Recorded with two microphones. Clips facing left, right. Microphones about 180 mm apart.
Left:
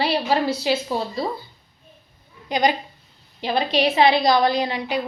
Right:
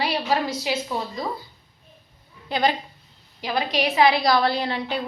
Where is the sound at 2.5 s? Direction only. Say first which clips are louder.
Left 2 dB; 15° left (ahead or behind).